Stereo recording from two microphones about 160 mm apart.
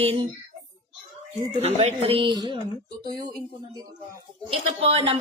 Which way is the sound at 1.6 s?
40° right (ahead or behind).